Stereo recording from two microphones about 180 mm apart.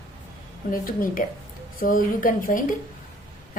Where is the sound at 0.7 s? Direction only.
50° left (ahead or behind).